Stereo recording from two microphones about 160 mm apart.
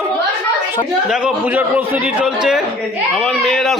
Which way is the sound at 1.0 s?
5° right (ahead or behind).